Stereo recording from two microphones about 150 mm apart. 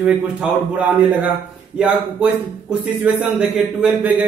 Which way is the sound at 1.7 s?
5° right (ahead or behind).